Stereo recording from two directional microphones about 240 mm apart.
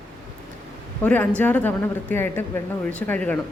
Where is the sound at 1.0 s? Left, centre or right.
Centre.